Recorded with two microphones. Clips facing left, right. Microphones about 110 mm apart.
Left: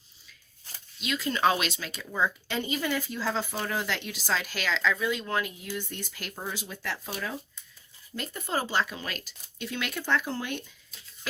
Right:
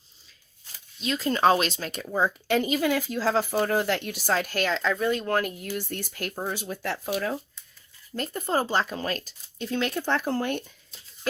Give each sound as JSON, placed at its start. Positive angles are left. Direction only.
{"t": 1.0, "sound": "speech", "side_deg": -35}